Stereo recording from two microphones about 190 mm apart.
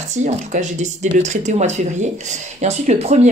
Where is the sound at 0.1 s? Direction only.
40° right (ahead or behind).